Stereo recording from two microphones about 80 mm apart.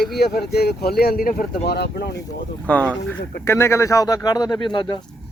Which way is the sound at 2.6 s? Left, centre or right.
Centre.